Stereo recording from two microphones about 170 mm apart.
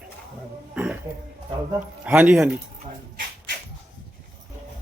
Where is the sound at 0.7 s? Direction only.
10° right (ahead or behind).